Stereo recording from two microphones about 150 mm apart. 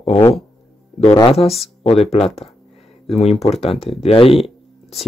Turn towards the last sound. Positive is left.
turn(degrees=0)  # may be behind; listen again after turning